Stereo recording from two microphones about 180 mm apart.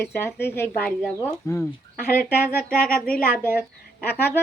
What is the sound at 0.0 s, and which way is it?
Speech, 15° left (ahead or behind).